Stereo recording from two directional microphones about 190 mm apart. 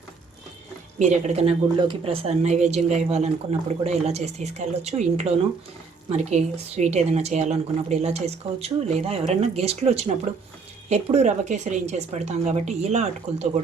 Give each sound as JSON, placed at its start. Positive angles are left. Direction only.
{"t": 0.9, "sound": "a woman's voice", "side_deg": -40}